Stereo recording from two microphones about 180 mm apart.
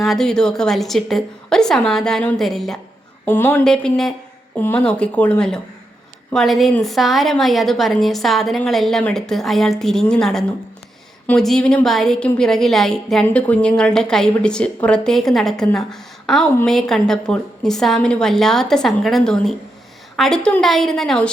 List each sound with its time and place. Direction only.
0.0 s a woman's voice: centre (ahead or behind)
3.2 s a woman's voice: 10° left (ahead or behind)